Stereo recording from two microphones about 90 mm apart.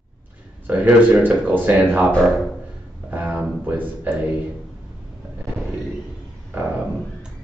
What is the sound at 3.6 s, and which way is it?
Speech, 20° right (ahead or behind).